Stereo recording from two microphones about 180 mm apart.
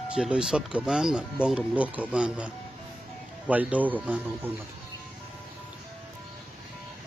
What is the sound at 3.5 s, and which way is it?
Speech, 10° right (ahead or behind).